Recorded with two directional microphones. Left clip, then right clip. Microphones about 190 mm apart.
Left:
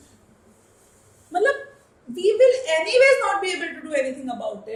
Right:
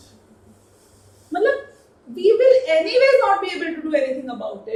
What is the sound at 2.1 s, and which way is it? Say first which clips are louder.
A woman's voice: right 3 dB; 40° left (ahead or behind).